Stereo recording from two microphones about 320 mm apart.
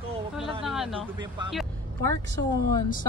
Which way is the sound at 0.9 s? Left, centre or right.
Centre.